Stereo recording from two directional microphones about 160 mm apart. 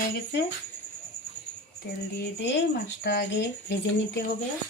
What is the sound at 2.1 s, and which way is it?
Speech, 90° left.